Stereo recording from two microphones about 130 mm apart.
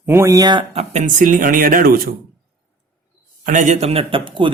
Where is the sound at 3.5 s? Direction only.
70° right (ahead or behind); by 4.5 s 40° right (ahead or behind).